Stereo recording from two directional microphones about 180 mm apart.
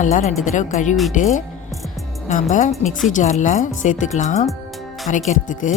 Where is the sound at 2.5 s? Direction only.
45° left (ahead or behind).